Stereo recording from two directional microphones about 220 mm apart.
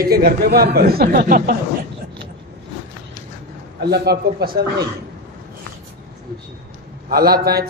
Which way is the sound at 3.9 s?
45° right (ahead or behind).